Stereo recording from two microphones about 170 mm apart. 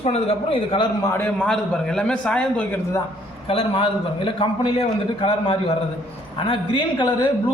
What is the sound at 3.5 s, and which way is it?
A man's voice, 35° left (ahead or behind).